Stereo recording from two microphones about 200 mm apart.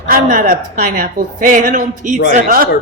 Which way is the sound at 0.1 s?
45° right (ahead or behind).